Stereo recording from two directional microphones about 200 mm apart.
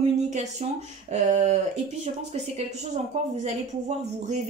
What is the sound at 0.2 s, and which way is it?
Speech, 35° right (ahead or behind).